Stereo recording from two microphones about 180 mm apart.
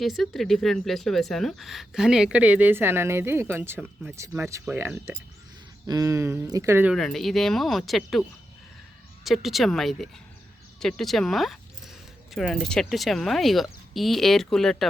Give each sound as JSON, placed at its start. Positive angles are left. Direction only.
{"t": 0.0, "sound": "speech", "side_deg": 0}
{"t": 6.9, "sound": "speech", "side_deg": 0}
{"t": 9.2, "sound": "speech", "side_deg": 0}